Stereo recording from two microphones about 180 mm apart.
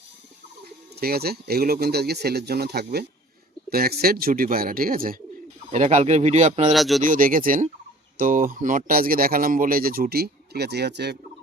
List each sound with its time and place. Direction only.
0.9 s speech: 60° right (ahead or behind)
5.7 s speech: 40° right (ahead or behind)
6.7 s speech: centre (ahead or behind)
7.0 s speech: 50° right (ahead or behind); by 11.2 s 70° right (ahead or behind)